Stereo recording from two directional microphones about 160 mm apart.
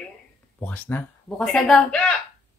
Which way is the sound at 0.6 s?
10° left (ahead or behind).